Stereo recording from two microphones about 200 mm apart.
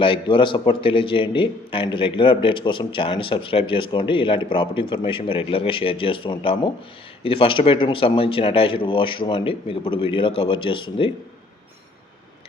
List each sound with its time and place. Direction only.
0.0 s speech: 25° left (ahead or behind)